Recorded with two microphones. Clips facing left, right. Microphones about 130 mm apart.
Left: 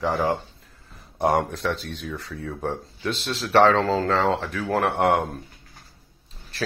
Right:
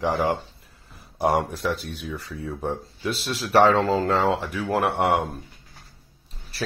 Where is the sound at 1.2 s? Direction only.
Centre (ahead or behind).